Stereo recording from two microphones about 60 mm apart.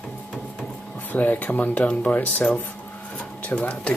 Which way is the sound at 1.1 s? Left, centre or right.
Left.